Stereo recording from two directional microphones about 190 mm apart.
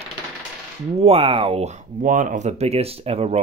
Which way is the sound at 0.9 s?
30° right (ahead or behind).